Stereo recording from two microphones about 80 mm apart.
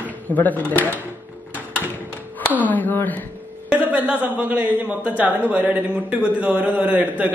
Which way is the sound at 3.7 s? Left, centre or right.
Centre.